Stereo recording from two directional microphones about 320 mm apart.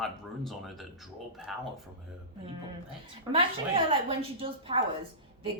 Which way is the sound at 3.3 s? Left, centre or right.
Centre.